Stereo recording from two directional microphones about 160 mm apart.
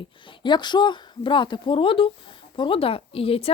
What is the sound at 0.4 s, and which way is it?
A woman's voice, 30° left (ahead or behind).